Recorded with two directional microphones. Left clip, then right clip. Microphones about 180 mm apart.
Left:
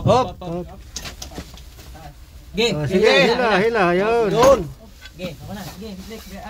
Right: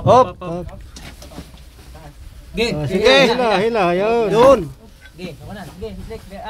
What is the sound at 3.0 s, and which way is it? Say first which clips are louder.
Speech: right 3 dB; 50° right (ahead or behind).